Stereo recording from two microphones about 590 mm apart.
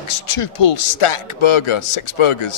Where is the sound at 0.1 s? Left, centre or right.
Left.